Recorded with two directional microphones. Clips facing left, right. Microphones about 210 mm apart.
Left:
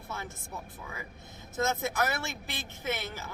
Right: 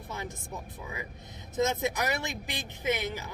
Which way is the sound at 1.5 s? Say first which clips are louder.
Right 2 dB; 15° right (ahead or behind).